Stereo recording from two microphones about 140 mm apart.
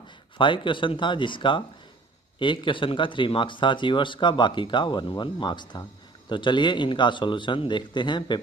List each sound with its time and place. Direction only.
0.4 s speech: 35° left (ahead or behind)